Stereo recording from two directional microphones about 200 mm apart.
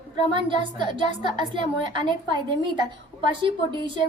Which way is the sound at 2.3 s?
25° right (ahead or behind).